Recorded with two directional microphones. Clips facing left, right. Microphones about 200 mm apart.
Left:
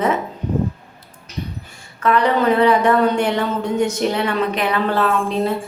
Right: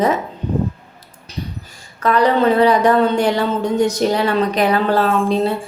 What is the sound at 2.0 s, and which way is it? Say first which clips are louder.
A woman's voice: right 2 dB; 35° right (ahead or behind).